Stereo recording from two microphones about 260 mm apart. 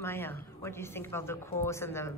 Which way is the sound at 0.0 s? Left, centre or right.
Centre.